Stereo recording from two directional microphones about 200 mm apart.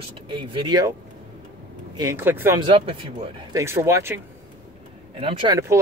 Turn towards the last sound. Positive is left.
turn(degrees=-25)  # may be behind; listen again after turning